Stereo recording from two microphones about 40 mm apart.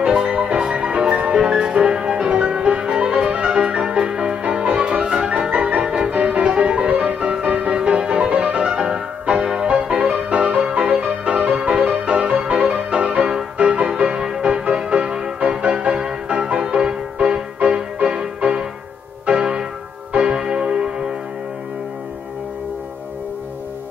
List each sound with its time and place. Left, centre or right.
0.0 s music: right
20.1 s church bell: right